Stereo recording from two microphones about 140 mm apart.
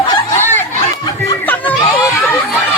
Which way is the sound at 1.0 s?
25° left (ahead or behind).